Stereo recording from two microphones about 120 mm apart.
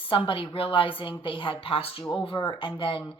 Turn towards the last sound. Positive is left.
turn(degrees=45)  # may be behind; listen again after turning